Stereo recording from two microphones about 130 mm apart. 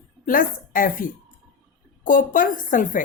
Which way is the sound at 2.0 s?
90° left.